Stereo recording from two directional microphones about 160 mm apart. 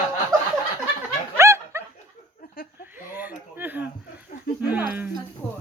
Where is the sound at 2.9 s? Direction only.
10° right (ahead or behind).